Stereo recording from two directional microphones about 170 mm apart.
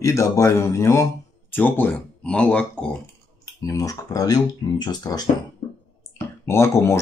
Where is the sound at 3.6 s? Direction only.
20° left (ahead or behind).